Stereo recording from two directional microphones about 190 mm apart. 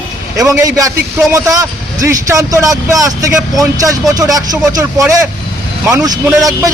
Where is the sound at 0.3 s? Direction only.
15° right (ahead or behind).